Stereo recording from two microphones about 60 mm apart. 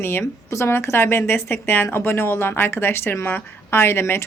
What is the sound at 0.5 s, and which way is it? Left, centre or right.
A woman's voice, left.